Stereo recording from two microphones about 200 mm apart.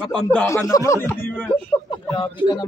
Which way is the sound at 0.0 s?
5° left (ahead or behind).